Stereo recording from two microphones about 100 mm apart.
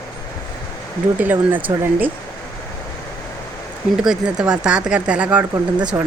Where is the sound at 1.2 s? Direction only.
20° right (ahead or behind).